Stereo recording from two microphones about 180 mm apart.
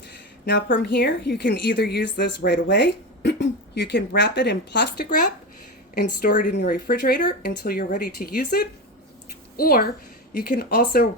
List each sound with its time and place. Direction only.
0.4 s a woman's voice: 70° left (ahead or behind)
6.2 s speech: 55° left (ahead or behind)